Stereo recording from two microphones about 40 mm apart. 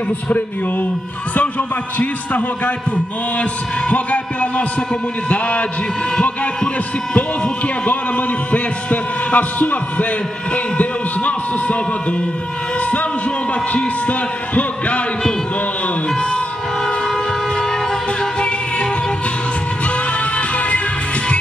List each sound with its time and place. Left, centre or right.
2.0 s music: left
3.9 s music: left
6.1 s speech: left
8.5 s a man's voice: left
13.7 s music: left
20.3 s music: left